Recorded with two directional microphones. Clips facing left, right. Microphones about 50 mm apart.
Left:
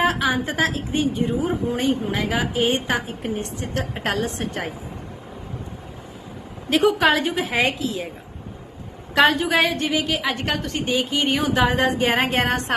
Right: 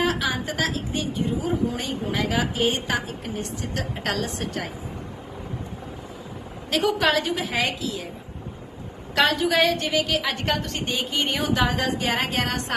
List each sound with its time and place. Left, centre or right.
0.0 s a woman's voice: left
6.7 s a woman's voice: left
9.1 s a woman's voice: left
9.6 s a woman's voice: centre
11.7 s a woman's voice: left